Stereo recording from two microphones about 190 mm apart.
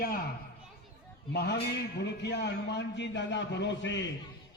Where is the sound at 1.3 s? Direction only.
60° left (ahead or behind).